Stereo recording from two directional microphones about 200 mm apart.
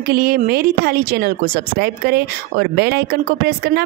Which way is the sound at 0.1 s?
50° right (ahead or behind).